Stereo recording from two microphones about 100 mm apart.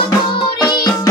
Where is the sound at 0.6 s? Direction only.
45° left (ahead or behind).